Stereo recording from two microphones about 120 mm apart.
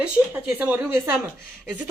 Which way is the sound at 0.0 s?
15° right (ahead or behind).